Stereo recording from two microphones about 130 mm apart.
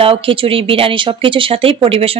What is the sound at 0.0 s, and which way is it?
Speech, 45° right (ahead or behind).